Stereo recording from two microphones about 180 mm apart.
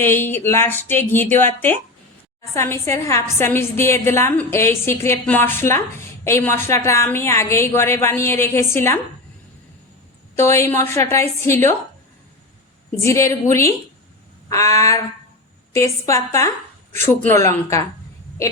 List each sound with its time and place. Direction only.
0.0 s a woman's voice: 10° left (ahead or behind)
10.3 s a woman's voice: 15° left (ahead or behind)
13.0 s a woman's voice: 15° left (ahead or behind)